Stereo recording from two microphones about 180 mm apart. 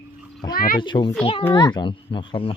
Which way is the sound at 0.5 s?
50° left (ahead or behind).